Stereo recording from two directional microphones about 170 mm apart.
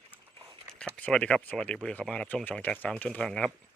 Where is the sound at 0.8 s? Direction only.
5° left (ahead or behind).